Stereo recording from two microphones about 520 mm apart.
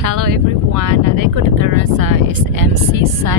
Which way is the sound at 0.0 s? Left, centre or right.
Right.